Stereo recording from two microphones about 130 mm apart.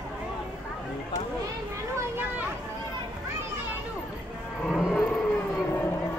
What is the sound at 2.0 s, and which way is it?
Speech, 15° right (ahead or behind).